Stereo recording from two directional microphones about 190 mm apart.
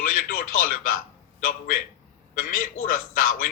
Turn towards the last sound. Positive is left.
turn(degrees=45)  # may be behind; listen again after turning